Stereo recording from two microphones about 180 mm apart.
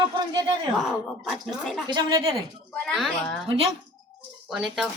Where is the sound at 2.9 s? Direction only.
5° left (ahead or behind).